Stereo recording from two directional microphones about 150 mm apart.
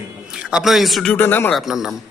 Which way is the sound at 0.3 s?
5° right (ahead or behind).